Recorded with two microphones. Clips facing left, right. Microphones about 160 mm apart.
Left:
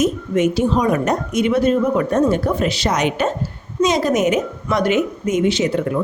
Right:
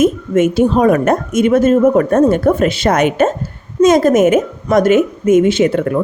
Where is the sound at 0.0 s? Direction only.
50° right (ahead or behind).